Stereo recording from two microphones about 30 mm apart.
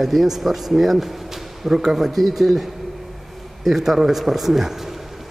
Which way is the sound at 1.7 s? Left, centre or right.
Centre.